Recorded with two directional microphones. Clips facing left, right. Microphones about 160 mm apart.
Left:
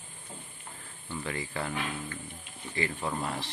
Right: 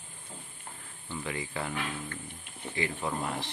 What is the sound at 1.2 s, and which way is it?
Speech, 15° right (ahead or behind).